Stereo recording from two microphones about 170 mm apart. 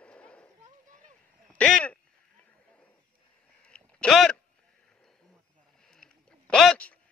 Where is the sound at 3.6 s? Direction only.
5° left (ahead or behind).